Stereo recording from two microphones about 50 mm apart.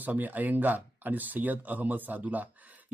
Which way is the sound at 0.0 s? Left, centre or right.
Right.